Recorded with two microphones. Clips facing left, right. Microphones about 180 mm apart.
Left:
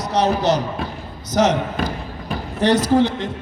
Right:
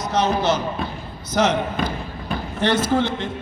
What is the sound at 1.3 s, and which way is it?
Speech, 40° left (ahead or behind).